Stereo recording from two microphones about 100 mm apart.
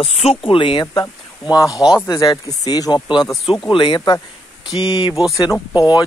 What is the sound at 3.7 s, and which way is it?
Speech, 60° left (ahead or behind).